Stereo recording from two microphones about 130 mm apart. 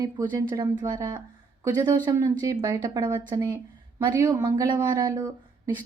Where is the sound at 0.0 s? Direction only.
30° right (ahead or behind).